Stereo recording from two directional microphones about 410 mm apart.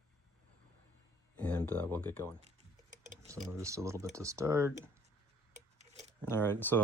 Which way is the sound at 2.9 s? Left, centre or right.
Centre.